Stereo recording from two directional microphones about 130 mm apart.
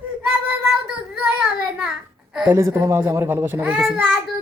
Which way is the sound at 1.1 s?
5° right (ahead or behind).